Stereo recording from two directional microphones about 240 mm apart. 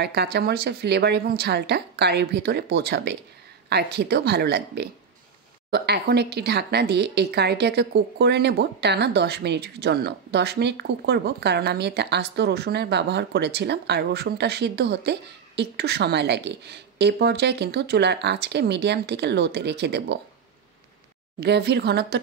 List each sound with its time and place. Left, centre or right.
0.0 s speech: right
21.4 s speech: right